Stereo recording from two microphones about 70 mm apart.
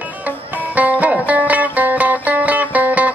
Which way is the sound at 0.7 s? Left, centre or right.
Right.